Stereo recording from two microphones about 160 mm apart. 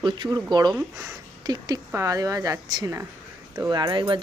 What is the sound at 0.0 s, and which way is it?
Speech, 25° right (ahead or behind).